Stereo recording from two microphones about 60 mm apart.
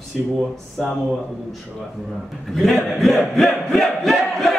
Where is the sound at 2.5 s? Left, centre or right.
Centre.